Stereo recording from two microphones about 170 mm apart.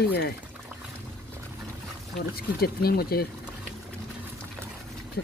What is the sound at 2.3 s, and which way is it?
Speech, 65° left (ahead or behind).